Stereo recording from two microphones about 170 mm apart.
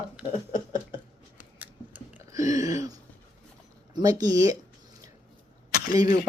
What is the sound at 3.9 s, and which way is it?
Speech, 20° right (ahead or behind).